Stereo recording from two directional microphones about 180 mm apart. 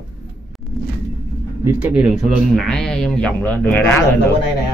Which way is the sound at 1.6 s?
10° right (ahead or behind).